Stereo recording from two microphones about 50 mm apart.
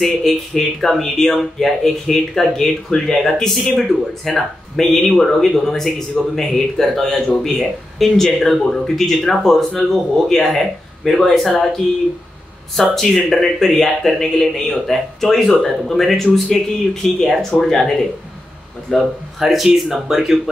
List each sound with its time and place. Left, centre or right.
0.0 s speech: centre
12.7 s speech: centre